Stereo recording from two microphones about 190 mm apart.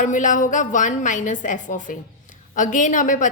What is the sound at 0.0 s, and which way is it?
A woman's voice, 40° left (ahead or behind).